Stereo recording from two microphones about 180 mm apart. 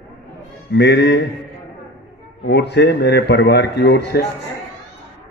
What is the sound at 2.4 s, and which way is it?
A man's voice, 70° left (ahead or behind).